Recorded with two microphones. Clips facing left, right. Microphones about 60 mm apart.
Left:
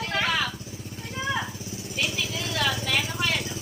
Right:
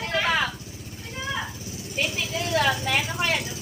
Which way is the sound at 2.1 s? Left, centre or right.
Right.